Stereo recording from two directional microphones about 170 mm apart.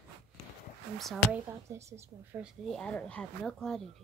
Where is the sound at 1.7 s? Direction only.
15° right (ahead or behind).